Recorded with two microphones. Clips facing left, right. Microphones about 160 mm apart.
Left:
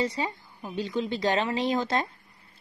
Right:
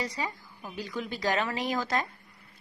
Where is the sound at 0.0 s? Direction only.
25° left (ahead or behind).